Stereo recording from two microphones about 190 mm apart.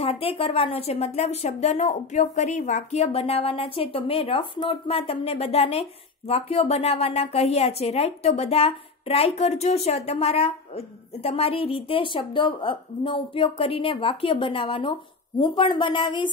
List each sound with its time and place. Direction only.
0.0 s a woman's voice: 30° left (ahead or behind)